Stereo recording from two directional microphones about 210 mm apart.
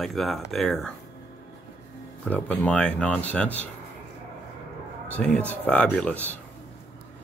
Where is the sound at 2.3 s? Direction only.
5° left (ahead or behind).